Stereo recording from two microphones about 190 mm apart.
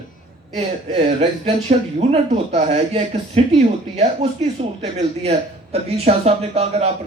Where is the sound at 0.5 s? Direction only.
35° right (ahead or behind).